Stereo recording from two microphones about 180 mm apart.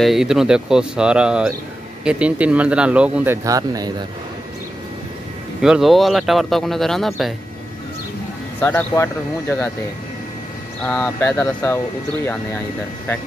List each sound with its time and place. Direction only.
0.0 s speech: centre (ahead or behind)
3.4 s speech: 20° right (ahead or behind)
5.6 s speech: centre (ahead or behind)
8.5 s speech: 10° left (ahead or behind)
10.8 s speech: 10° left (ahead or behind)